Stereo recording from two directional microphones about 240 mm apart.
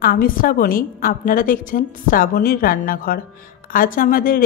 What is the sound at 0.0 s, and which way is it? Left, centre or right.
A woman's voice, left.